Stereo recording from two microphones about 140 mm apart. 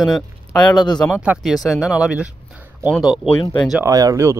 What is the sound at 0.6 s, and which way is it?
Speech, 30° left (ahead or behind).